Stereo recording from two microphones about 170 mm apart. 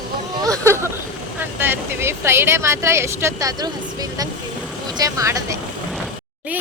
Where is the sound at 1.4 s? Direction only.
10° right (ahead or behind).